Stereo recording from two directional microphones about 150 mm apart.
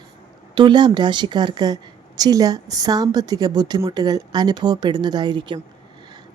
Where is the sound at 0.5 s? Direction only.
30° right (ahead or behind).